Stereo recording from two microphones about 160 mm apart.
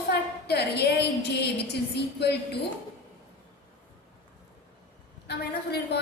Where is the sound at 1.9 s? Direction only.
90° left.